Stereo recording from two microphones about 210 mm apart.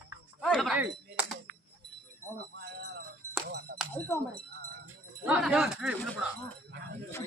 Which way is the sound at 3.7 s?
50° right (ahead or behind).